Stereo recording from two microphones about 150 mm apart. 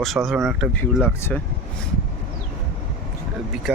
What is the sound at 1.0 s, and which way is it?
Speech, 15° left (ahead or behind).